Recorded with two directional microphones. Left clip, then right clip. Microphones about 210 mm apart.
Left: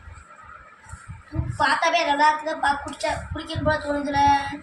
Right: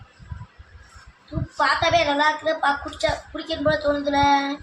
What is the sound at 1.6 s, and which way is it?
Speech, 40° right (ahead or behind).